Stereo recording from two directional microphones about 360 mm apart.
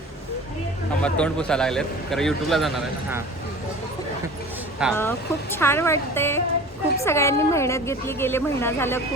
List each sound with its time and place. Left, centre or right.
1.0 s a man's voice: centre
4.8 s a woman's voice: centre